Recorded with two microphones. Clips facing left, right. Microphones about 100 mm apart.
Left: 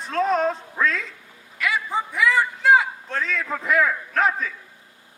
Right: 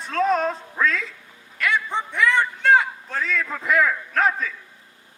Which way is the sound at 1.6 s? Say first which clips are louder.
Right 1 dB; centre (ahead or behind).